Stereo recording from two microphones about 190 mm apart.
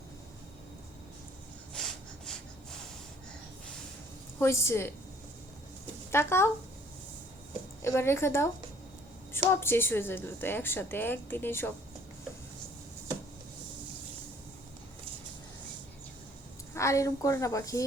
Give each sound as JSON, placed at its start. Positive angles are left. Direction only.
{"t": 1.7, "sound": "snort", "side_deg": 5}
{"t": 4.4, "sound": "a woman's voice", "side_deg": 15}
{"t": 6.1, "sound": "speech", "side_deg": 15}
{"t": 7.8, "sound": "a woman's voice", "side_deg": 15}
{"t": 16.7, "sound": "a woman's voice", "side_deg": 15}